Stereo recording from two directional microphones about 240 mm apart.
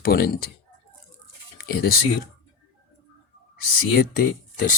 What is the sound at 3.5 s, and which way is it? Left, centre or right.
Speech, left.